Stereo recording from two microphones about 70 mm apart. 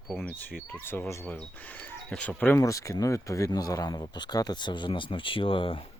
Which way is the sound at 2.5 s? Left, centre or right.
Left.